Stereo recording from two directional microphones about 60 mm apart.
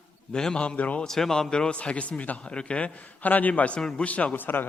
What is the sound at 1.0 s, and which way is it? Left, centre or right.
A man's voice, centre.